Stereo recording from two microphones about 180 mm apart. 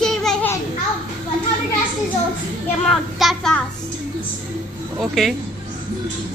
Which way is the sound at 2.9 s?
Centre (ahead or behind).